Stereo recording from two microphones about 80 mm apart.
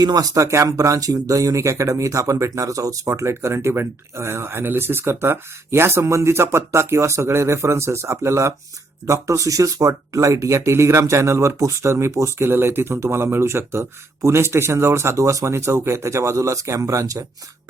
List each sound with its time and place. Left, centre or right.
0.0 s speech: right